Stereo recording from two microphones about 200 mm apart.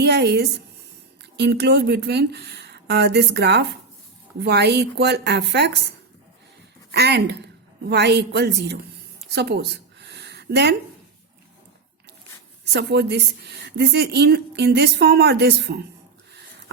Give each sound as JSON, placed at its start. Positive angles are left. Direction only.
{"t": 0.0, "sound": "a woman's voice", "side_deg": -55}
{"t": 6.9, "sound": "speech", "side_deg": -55}
{"t": 9.3, "sound": "a sound", "side_deg": -55}
{"t": 12.7, "sound": "speech", "side_deg": -55}